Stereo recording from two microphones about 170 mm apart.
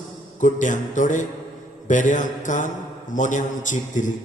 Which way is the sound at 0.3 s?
50° left (ahead or behind).